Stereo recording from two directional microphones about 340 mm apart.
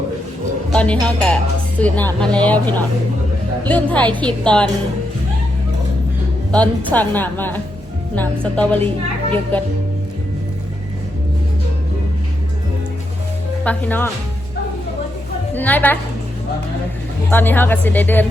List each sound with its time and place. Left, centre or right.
0.7 s a woman's voice: centre
6.5 s a woman's voice: centre
13.7 s a woman's voice: centre
15.5 s a woman's voice: centre
17.3 s a woman's voice: centre